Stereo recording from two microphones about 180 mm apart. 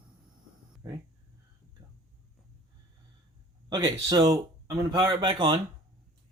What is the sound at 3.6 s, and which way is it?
Speech, 25° right (ahead or behind).